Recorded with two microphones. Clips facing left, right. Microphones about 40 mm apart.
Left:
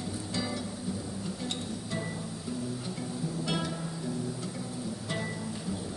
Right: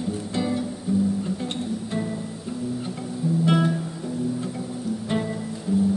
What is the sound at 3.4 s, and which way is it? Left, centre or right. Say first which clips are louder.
Music: right 12 dB; right.